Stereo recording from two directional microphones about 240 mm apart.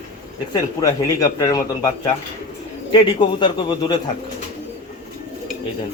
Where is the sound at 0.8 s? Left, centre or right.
Centre.